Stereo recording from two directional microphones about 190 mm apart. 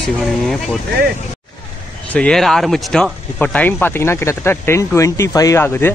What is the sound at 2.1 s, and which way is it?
Speech, 5° left (ahead or behind).